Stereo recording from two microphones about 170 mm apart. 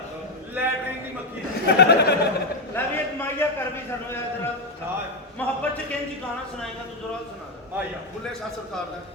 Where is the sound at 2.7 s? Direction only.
15° left (ahead or behind).